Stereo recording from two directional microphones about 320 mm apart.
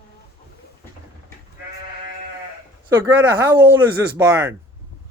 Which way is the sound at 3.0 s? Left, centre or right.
Centre.